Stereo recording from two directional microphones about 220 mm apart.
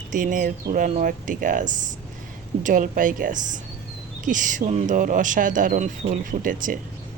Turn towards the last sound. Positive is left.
turn(degrees=-40)  # may be behind; listen again after turning